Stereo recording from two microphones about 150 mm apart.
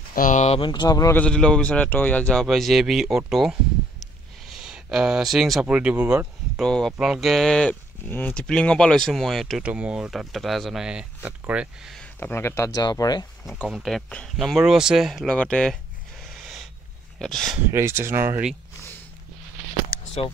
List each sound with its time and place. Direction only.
0.1 s speech: 60° left (ahead or behind)
0.6 s speech: 30° left (ahead or behind)
1.1 s speech: 5° left (ahead or behind)
4.0 s a sound: centre (ahead or behind)
6.6 s speech: centre (ahead or behind)
12.2 s speech: 15° left (ahead or behind)
13.7 s speech: centre (ahead or behind)
16.3 s a sound: centre (ahead or behind)
17.2 s speech: 5° left (ahead or behind)
17.7 s speech: 15° right (ahead or behind)